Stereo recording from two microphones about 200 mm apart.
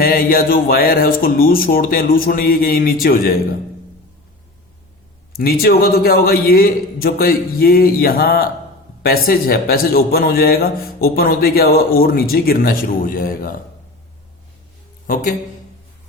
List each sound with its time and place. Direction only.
0.0 s a man's voice: 45° left (ahead or behind)
5.4 s a man's voice: 50° left (ahead or behind)
15.0 s speech: 45° left (ahead or behind)